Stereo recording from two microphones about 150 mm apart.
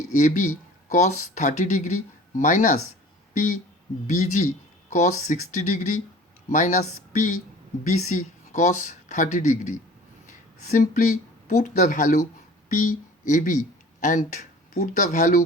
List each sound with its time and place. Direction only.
0.1 s speech: 55° left (ahead or behind)
4.9 s speech: 55° left (ahead or behind)